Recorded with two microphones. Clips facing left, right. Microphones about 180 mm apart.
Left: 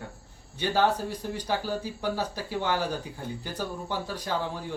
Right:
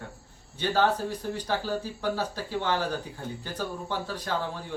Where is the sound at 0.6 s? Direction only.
10° left (ahead or behind).